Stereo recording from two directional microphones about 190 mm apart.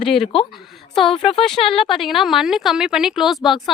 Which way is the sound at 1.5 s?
30° left (ahead or behind).